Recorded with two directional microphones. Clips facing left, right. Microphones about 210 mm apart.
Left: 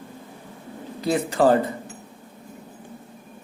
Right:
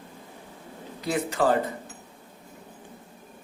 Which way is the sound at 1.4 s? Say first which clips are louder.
Left 6 dB; 35° left (ahead or behind).